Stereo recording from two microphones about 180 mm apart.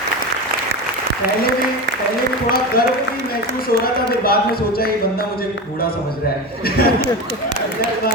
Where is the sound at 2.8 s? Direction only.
55° left (ahead or behind).